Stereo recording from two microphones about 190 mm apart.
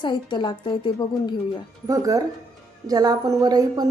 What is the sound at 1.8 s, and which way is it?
A woman's voice, 20° right (ahead or behind).